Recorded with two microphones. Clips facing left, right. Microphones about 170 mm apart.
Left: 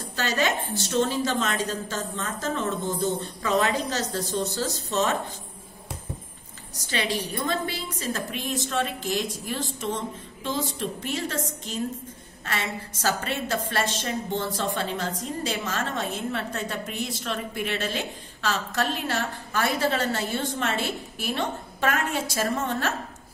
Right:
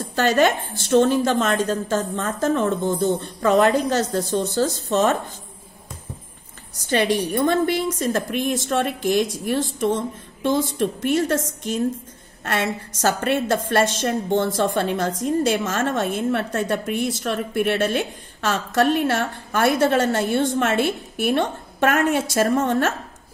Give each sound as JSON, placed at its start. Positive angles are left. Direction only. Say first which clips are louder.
{"t": 0.1, "sound": "a woman's voice", "louder": "right 8 dB", "side_deg": -55}
{"t": 6.9, "sound": "a woman's voice", "louder": "right 8 dB", "side_deg": -55}